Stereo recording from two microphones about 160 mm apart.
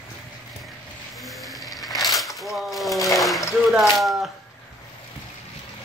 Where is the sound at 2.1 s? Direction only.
Centre (ahead or behind).